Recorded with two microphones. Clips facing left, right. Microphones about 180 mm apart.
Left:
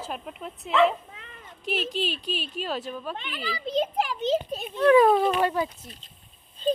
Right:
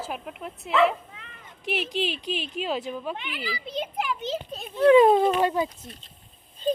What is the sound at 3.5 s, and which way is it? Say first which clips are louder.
Speech: left 7 dB; 40° left (ahead or behind).